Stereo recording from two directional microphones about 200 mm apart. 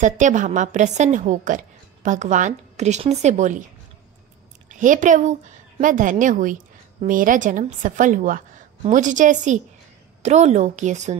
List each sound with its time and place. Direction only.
0.0 s a woman's voice: 40° right (ahead or behind)
4.6 s a woman's voice: 40° right (ahead or behind)